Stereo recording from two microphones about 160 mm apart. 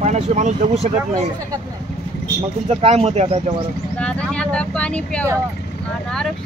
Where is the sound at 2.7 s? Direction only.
40° right (ahead or behind).